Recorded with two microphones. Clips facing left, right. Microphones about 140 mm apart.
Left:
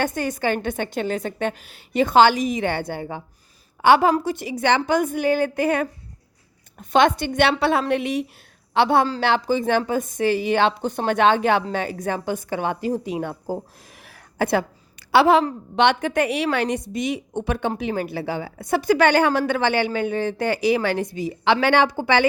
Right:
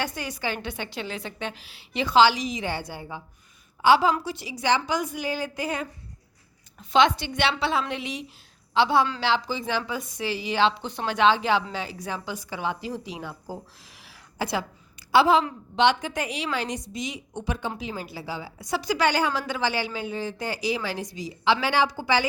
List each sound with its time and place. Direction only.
0.0 s a woman's voice: 50° left (ahead or behind)